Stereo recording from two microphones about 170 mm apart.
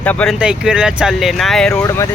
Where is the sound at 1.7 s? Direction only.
20° left (ahead or behind).